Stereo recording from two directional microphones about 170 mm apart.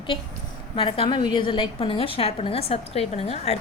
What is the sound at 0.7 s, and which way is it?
A woman's voice, 30° left (ahead or behind).